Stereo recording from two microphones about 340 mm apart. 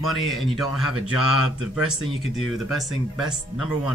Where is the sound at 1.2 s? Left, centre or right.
Left.